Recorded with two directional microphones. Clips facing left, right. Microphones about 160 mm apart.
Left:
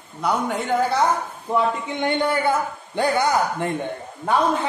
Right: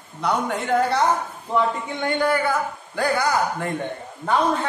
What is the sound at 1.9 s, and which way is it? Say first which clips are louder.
A man's voice: right 1 dB; 20° left (ahead or behind).